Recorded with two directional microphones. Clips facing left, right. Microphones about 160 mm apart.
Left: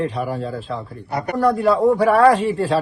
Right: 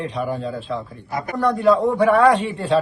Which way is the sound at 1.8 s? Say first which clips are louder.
Left 2 dB; 40° left (ahead or behind).